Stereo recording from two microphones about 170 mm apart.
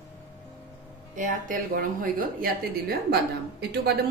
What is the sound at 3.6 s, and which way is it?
Speech, 75° right (ahead or behind).